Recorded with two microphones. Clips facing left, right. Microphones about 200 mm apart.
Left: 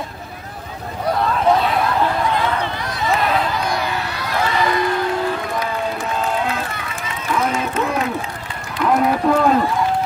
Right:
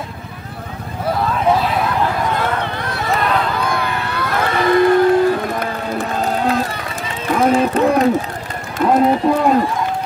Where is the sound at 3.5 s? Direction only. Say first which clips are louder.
Right 2 dB; 55° right (ahead or behind).